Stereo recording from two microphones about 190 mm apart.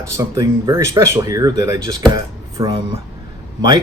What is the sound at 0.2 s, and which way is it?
Speech, 15° right (ahead or behind).